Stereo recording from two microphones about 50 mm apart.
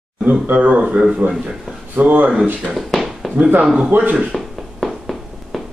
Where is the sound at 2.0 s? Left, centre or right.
Right.